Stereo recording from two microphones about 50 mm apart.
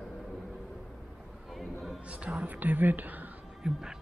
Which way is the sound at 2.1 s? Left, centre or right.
Right.